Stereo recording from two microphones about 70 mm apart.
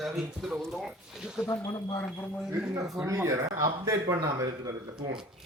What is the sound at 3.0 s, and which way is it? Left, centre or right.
Speech, right.